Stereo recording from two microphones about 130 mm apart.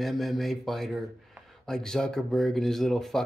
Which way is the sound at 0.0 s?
Centre (ahead or behind).